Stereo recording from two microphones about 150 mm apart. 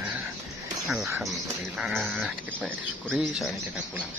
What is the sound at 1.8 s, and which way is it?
Speech, centre (ahead or behind).